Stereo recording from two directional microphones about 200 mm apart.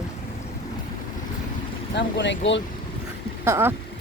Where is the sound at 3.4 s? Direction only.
10° right (ahead or behind).